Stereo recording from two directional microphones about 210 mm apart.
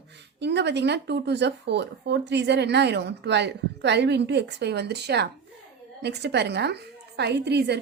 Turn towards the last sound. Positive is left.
turn(degrees=-50)  # may be behind; listen again after turning